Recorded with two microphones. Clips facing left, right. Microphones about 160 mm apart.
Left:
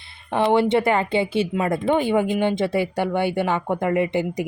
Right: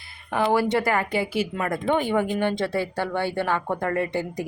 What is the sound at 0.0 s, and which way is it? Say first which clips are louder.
Speech: left 3 dB; 25° left (ahead or behind).